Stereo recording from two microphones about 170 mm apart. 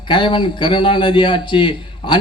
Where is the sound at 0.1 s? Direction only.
30° left (ahead or behind).